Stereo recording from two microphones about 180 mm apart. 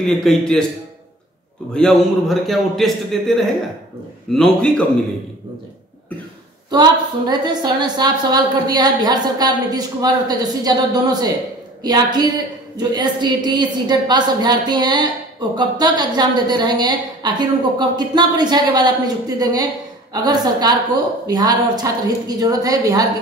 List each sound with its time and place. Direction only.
0.0 s a man's voice: centre (ahead or behind)
1.7 s a man's voice: 5° left (ahead or behind)
6.7 s a woman's voice: 25° right (ahead or behind)